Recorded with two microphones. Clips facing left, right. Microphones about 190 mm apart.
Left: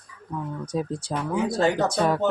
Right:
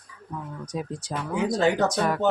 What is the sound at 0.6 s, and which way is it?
Speech, 30° left (ahead or behind).